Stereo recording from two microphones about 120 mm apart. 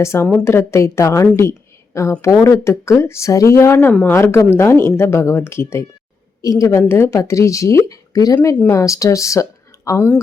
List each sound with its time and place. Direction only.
0.0 s speech: 20° left (ahead or behind)
1.4 s a sound: 25° left (ahead or behind)
2.2 s speech: 25° left (ahead or behind)